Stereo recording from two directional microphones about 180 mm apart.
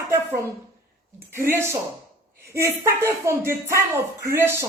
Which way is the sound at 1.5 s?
15° right (ahead or behind).